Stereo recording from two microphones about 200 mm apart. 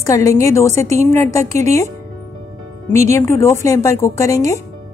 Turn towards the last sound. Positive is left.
turn(degrees=15)  # may be behind; listen again after turning